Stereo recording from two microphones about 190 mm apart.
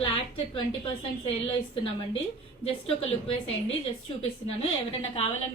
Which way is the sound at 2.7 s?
30° left (ahead or behind).